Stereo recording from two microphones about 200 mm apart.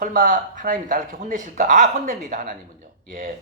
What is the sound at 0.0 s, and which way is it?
Speech, 40° right (ahead or behind).